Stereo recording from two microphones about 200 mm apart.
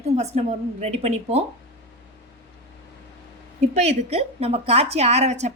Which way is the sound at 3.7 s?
30° right (ahead or behind).